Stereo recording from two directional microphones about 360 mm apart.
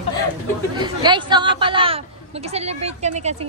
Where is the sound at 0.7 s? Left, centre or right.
Centre.